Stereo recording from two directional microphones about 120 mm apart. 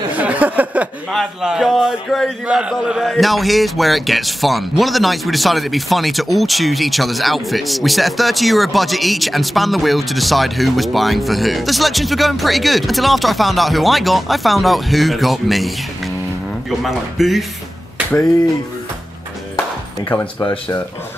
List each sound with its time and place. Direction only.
0.2 s a sound: 10° right (ahead or behind)
1.1 s speech: 5° right (ahead or behind)
16.8 s speech: centre (ahead or behind)
20.1 s speech: 15° left (ahead or behind)